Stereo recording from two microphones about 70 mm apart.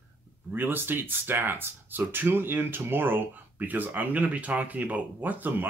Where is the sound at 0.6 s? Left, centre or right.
Right.